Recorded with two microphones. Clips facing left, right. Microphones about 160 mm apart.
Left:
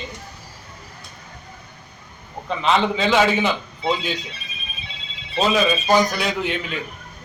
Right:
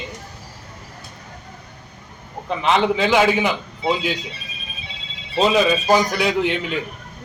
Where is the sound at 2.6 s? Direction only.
15° right (ahead or behind).